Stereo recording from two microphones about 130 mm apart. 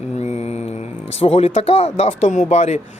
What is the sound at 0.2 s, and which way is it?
Mantra, 55° left (ahead or behind).